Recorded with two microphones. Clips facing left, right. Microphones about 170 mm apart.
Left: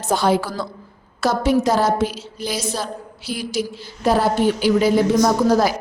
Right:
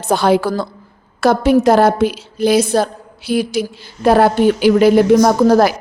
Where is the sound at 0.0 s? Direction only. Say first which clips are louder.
Right 5 dB; 65° right (ahead or behind).